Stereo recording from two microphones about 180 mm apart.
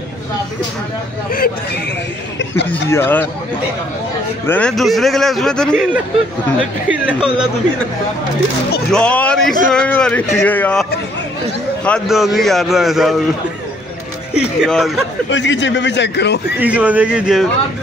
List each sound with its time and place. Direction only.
2.3 s a man's voice: 80° left
2.9 s speech: 10° left (ahead or behind)
4.5 s a man's voice: 5° left (ahead or behind)
6.9 s speech: 5° right (ahead or behind)
8.9 s a man's voice: 5° left (ahead or behind)
14.3 s a man's voice: centre (ahead or behind)
15.2 s a man's voice: 90° left; by 16.3 s 70° left (ahead or behind)
16.5 s speech: 10° right (ahead or behind)